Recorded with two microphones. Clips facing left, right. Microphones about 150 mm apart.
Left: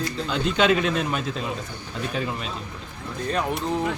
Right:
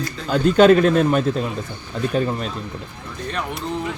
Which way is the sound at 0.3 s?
45° right (ahead or behind).